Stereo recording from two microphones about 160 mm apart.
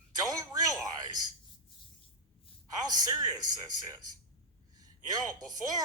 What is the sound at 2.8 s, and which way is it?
Speech, 25° right (ahead or behind).